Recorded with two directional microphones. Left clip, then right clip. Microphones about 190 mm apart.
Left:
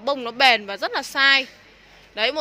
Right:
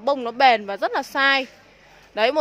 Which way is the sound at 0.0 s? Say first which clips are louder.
Right 1 dB; 20° right (ahead or behind).